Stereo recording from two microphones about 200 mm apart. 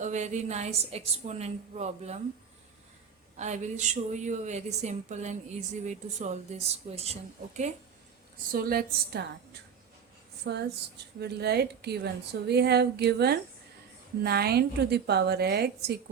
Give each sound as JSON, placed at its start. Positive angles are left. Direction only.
{"t": 0.0, "sound": "a woman's voice", "side_deg": -35}
{"t": 3.3, "sound": "a woman's voice", "side_deg": -35}
{"t": 8.5, "sound": "a woman's voice", "side_deg": -50}